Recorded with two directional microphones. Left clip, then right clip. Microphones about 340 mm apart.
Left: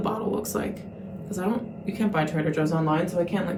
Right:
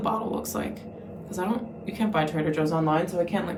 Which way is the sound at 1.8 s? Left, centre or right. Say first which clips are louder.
Even; centre.